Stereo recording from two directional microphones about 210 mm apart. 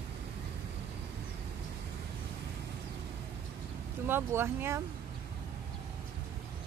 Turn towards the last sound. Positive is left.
turn(degrees=-10)  # may be behind; listen again after turning